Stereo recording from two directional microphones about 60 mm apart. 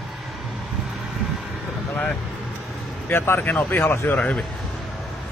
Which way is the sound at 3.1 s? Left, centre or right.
Left.